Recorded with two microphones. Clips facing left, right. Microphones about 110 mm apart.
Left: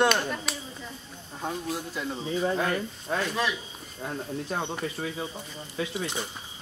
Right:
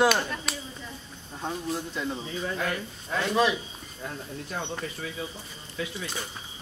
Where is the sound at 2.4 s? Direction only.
35° left (ahead or behind).